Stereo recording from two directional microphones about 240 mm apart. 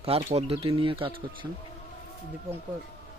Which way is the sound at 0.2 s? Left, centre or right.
Right.